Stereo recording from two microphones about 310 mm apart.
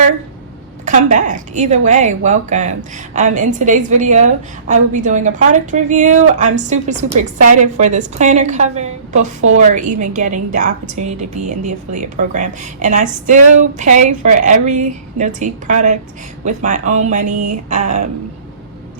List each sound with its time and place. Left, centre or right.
0.9 s a woman's voice: right